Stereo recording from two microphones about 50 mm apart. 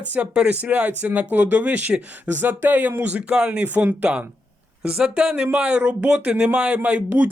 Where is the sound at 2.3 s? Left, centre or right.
Right.